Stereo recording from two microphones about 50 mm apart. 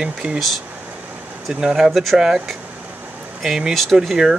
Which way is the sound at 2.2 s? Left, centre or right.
Centre.